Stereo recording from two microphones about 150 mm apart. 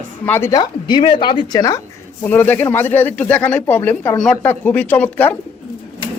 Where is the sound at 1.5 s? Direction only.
25° left (ahead or behind).